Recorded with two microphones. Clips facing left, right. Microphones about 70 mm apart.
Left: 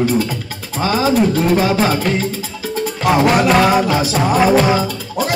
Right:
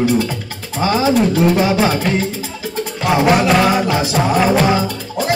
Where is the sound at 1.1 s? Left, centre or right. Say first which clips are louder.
Even; centre.